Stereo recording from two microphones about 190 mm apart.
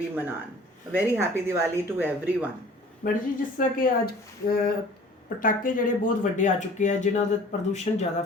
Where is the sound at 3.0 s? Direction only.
45° left (ahead or behind).